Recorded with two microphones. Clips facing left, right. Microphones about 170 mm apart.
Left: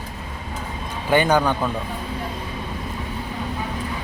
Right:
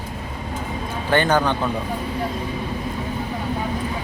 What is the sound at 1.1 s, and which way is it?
Speech, 10° left (ahead or behind).